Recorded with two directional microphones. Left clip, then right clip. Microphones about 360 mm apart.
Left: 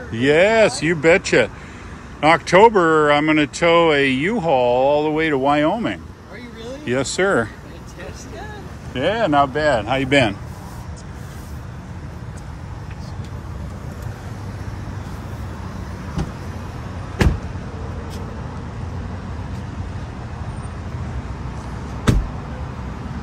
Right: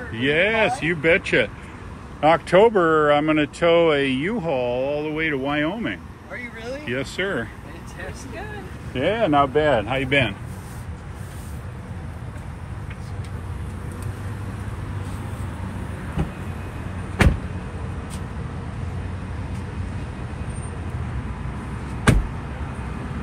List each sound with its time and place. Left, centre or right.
0.1 s speech: left
0.4 s speech: centre
8.9 s speech: centre